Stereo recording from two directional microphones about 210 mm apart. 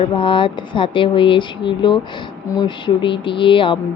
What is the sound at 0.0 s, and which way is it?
Speech, 25° left (ahead or behind).